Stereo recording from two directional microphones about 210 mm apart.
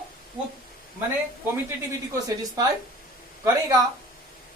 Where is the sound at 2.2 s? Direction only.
15° right (ahead or behind).